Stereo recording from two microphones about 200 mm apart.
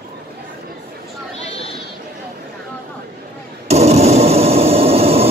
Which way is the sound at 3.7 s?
30° right (ahead or behind).